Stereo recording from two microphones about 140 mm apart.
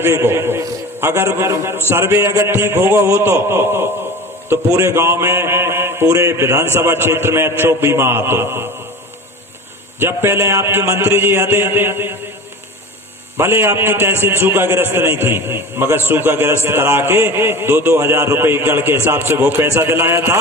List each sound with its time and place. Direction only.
0.0 s a man's voice: 15° right (ahead or behind)
10.0 s a man's voice: 15° right (ahead or behind)
13.3 s a man's voice: 15° right (ahead or behind)